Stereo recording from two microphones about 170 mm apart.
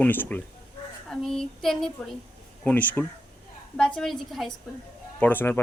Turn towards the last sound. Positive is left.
turn(degrees=10)  # may be behind; listen again after turning